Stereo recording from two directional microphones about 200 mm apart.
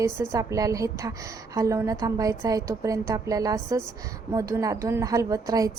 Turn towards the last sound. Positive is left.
turn(degrees=-15)  # may be behind; listen again after turning